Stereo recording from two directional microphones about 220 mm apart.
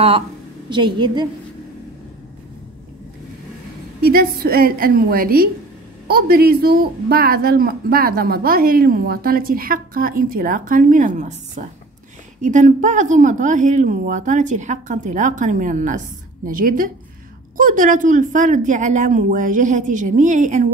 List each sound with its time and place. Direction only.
0.7 s a woman's voice: 20° right (ahead or behind)
4.0 s a woman's voice: 45° right (ahead or behind)